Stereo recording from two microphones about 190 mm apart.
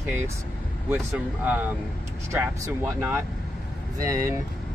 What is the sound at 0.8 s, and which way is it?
Speech, 10° right (ahead or behind).